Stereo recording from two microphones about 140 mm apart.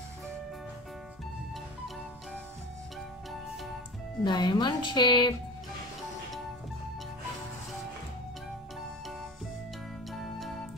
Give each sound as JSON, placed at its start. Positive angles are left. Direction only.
{"t": 4.2, "sound": "speech", "side_deg": 30}
{"t": 10.1, "sound": "music", "side_deg": 0}